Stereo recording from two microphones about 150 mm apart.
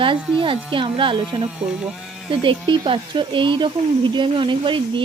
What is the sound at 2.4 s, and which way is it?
Speech, 35° right (ahead or behind).